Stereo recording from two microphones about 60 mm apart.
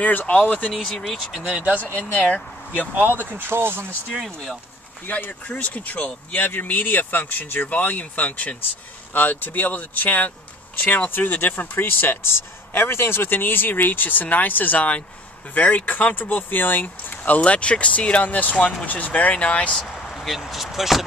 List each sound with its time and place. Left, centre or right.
0.0 s speech: left
0.8 s speech: centre
1.4 s speech: right
1.8 s speech: left
2.9 s speech: right
5.0 s speech: left
19.8 s a sound: centre
20.2 s speech: centre